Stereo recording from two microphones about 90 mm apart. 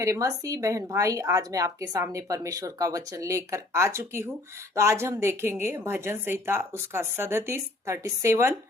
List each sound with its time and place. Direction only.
0.0 s a woman's voice: 35° right (ahead or behind)